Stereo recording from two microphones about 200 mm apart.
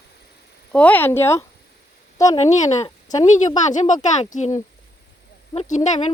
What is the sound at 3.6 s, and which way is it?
Speech, 35° left (ahead or behind).